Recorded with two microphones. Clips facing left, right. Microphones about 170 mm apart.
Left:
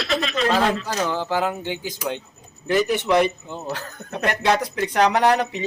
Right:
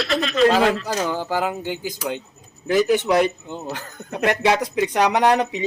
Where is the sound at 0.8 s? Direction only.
10° right (ahead or behind).